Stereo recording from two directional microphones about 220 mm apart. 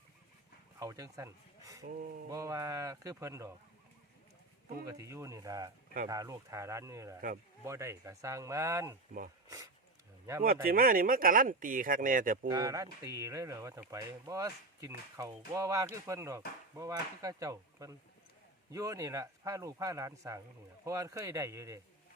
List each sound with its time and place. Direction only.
0.8 s speech: 15° right (ahead or behind)
1.8 s speech: 40° right (ahead or behind)
2.3 s speech: 15° right (ahead or behind)
4.9 s speech: 15° right (ahead or behind)
10.4 s speech: 40° right (ahead or behind)
12.5 s speech: 15° right (ahead or behind)